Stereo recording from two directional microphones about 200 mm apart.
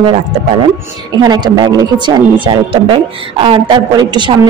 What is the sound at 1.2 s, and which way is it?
Speech, 20° right (ahead or behind).